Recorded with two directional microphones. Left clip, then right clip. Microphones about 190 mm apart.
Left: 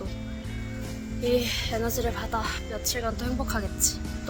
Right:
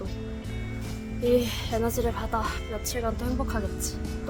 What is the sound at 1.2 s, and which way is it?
Speech, 15° right (ahead or behind).